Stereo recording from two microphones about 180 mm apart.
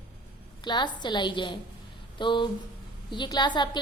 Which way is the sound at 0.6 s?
25° left (ahead or behind).